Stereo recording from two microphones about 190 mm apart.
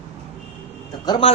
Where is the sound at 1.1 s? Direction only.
30° left (ahead or behind).